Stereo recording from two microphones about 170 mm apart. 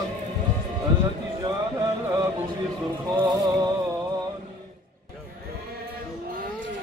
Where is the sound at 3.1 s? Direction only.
25° right (ahead or behind).